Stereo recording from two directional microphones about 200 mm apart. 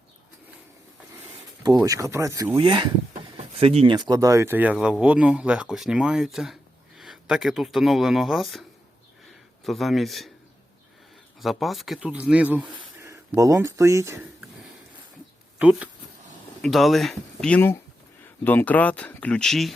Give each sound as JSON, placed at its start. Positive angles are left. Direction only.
{"t": 1.6, "sound": "speech", "side_deg": -20}
{"t": 9.6, "sound": "speech", "side_deg": 0}
{"t": 11.3, "sound": "speech", "side_deg": 0}
{"t": 15.5, "sound": "speech", "side_deg": -5}